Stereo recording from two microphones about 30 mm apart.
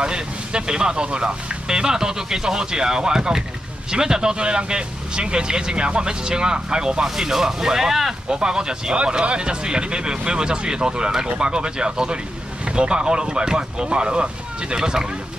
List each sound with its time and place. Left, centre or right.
0.0 s speech: right
8.3 s speech: right
14.8 s speech: right